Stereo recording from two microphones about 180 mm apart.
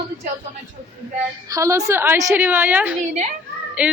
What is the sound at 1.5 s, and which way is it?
A child's voice, 15° right (ahead or behind).